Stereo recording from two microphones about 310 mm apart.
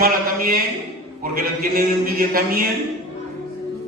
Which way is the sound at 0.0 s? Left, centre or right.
Right.